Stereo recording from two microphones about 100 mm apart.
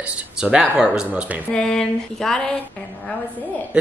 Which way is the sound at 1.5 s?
5° left (ahead or behind).